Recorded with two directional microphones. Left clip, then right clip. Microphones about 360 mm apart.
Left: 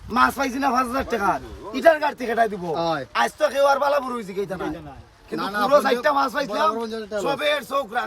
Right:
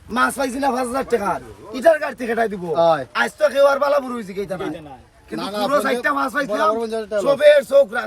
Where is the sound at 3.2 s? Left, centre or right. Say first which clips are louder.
Right 4 dB; centre.